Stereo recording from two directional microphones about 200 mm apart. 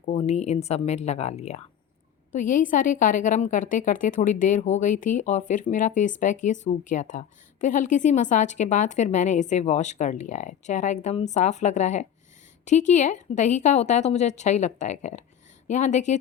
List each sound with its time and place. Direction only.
0.0 s a woman's voice: 35° left (ahead or behind)